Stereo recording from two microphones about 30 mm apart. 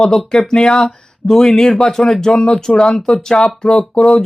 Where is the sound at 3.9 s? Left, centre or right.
Left.